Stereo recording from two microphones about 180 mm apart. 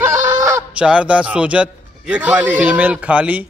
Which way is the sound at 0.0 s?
15° right (ahead or behind).